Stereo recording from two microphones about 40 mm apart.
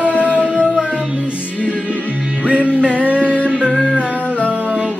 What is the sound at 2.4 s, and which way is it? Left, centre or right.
Music, right.